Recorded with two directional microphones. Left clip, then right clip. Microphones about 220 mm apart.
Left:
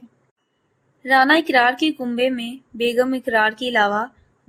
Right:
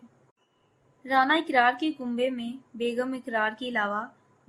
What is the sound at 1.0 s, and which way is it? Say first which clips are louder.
A woman's voice: left 8 dB; 25° left (ahead or behind).